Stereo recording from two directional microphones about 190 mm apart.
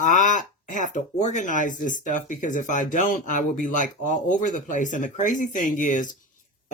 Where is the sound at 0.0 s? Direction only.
40° left (ahead or behind).